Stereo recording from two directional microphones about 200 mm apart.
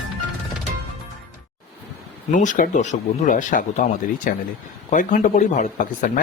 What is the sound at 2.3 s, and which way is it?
Speech, 40° left (ahead or behind).